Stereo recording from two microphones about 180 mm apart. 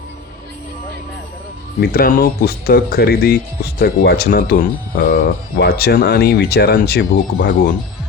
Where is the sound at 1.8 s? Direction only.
55° left (ahead or behind).